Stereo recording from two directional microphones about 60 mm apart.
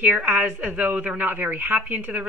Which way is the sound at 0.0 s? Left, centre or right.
Right.